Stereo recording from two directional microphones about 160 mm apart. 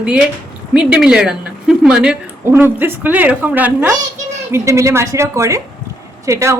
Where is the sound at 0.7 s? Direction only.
5° right (ahead or behind).